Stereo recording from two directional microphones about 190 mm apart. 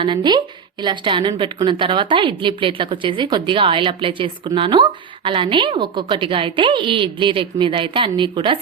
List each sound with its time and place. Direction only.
0.0 s a woman's voice: 25° right (ahead or behind)